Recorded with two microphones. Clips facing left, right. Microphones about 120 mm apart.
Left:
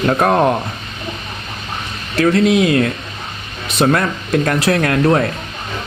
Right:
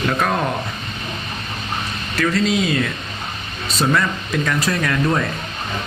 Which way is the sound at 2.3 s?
60° left (ahead or behind).